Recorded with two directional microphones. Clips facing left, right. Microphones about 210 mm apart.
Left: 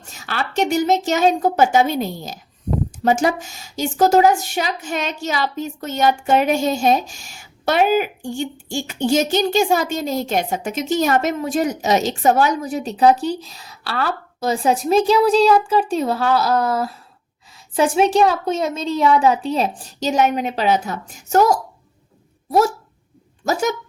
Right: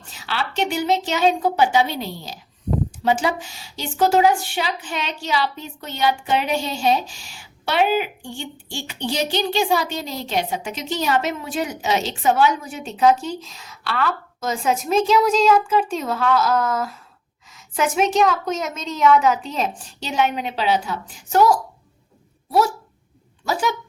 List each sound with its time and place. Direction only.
0.0 s a woman's voice: 45° left (ahead or behind)
23.5 s a woman's voice: 45° left (ahead or behind)